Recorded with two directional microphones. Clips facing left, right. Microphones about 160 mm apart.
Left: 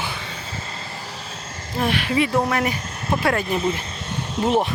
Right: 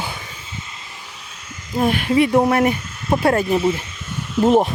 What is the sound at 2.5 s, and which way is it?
Speech, 45° right (ahead or behind).